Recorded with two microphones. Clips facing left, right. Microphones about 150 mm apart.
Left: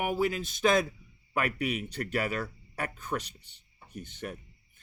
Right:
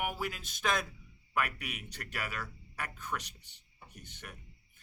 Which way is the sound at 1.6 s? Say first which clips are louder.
Left 13 dB; 25° left (ahead or behind).